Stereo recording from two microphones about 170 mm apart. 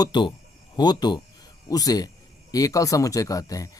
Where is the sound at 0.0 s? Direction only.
25° left (ahead or behind).